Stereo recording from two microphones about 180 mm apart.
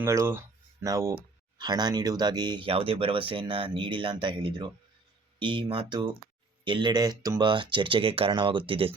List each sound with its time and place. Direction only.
0.0 s speech: 15° right (ahead or behind)